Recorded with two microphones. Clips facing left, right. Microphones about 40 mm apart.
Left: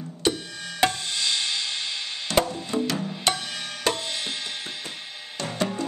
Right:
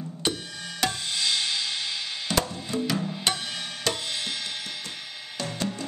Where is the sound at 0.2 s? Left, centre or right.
Centre.